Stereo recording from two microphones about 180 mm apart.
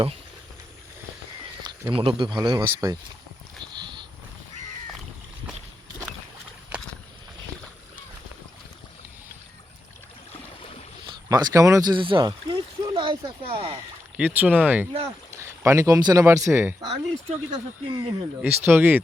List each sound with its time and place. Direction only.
1.7 s a sound: 25° right (ahead or behind)
2.0 s speech: 30° right (ahead or behind)
3.6 s a sound: 25° right (ahead or behind)
11.0 s speech: 20° right (ahead or behind)
14.2 s speech: 10° right (ahead or behind)
16.8 s speech: 35° right (ahead or behind)
18.4 s speech: 10° right (ahead or behind)